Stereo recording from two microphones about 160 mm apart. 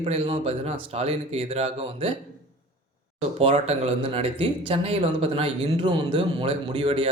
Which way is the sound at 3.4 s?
40° right (ahead or behind).